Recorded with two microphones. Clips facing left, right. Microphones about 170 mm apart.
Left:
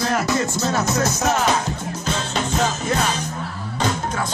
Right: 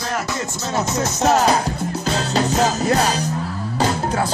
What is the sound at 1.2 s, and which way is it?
Music, 35° right (ahead or behind).